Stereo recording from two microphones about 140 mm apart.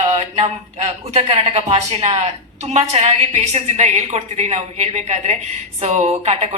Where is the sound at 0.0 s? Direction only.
50° right (ahead or behind).